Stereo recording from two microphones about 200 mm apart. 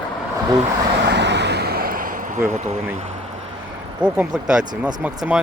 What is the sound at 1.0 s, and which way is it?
Vehicle, 60° right (ahead or behind).